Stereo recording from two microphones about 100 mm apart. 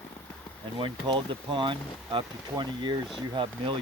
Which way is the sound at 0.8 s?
60° right (ahead or behind).